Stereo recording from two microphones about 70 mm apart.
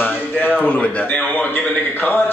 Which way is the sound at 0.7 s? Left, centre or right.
Centre.